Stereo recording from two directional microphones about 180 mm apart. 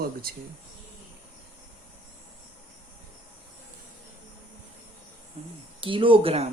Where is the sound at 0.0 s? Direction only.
55° right (ahead or behind).